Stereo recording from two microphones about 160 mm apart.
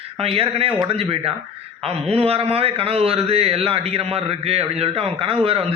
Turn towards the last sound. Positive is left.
turn(degrees=-35)  # may be behind; listen again after turning